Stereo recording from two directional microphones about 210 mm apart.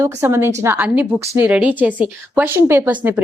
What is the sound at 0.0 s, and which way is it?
A woman's voice, 10° right (ahead or behind).